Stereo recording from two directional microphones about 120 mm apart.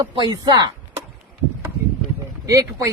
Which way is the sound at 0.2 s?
35° right (ahead or behind).